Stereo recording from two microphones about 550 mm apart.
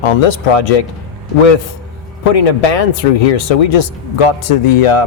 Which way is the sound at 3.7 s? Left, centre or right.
Left.